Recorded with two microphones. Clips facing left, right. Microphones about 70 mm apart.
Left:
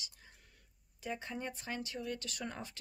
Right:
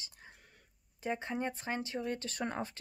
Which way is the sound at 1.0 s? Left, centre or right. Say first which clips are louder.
Right 5 dB; right.